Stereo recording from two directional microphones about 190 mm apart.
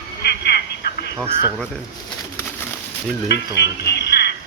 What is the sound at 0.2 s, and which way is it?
Telephone, 60° left (ahead or behind).